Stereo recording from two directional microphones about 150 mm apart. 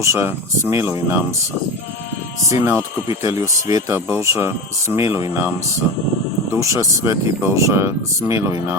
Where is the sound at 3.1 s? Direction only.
20° right (ahead or behind).